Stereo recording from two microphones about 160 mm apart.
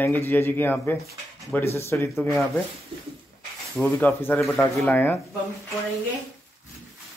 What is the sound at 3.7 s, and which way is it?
Speech, 10° left (ahead or behind).